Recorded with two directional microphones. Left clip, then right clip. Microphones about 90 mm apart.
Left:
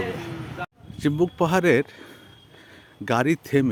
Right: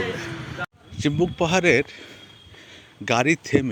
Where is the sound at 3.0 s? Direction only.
40° left (ahead or behind).